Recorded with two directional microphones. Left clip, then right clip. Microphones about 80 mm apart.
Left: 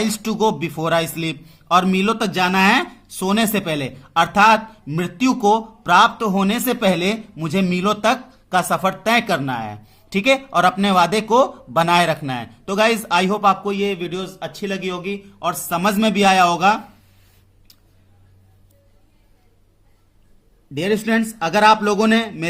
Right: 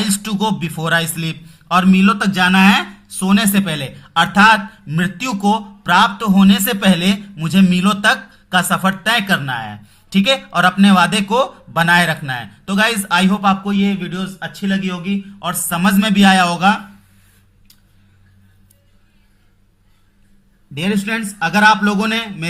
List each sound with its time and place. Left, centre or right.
0.0 s a man's voice: left
1.9 s speech: left
3.5 s a man's voice: left
6.7 s a man's voice: left
15.7 s a man's voice: left
20.7 s speech: left
21.8 s speech: left